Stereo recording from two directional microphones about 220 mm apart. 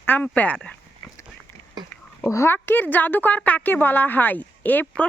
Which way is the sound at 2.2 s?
10° left (ahead or behind).